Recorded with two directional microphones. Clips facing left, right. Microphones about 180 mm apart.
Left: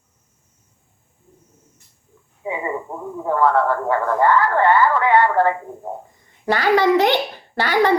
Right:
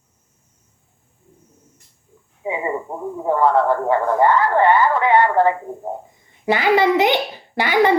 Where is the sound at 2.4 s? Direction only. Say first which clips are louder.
Right 2 dB; 20° right (ahead or behind).